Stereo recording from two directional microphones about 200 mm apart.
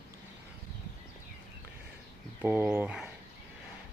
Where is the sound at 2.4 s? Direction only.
10° right (ahead or behind).